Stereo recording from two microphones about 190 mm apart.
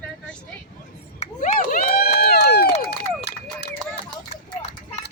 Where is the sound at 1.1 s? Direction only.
40° left (ahead or behind); by 2.9 s 55° left (ahead or behind).